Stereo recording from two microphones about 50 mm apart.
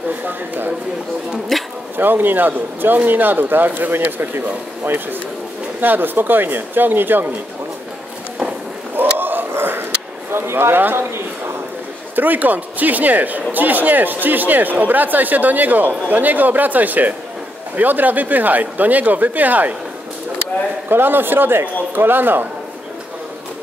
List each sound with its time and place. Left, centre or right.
0.2 s speech: right
1.5 s bee: centre
2.0 s speech: right
9.2 s a sound: right
10.3 s a man's voice: right
12.2 s speech: right
20.9 s speech: right